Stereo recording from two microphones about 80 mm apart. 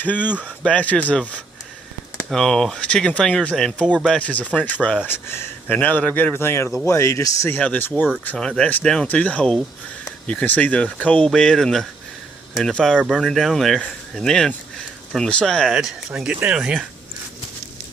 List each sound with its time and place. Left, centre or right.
0.0 s a man's voice: left
2.1 s speech: centre
5.0 s a man's voice: left
7.6 s a man's voice: left
8.4 s speech: centre
15.7 s speech: centre
16.3 s speech: centre
16.6 s speech: centre